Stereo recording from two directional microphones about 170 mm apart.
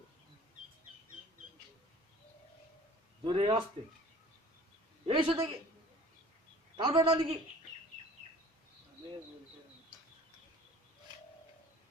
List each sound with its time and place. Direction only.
3.2 s a man's voice: 30° right (ahead or behind)
5.0 s a man's voice: 30° right (ahead or behind)
6.7 s a man's voice: 30° right (ahead or behind)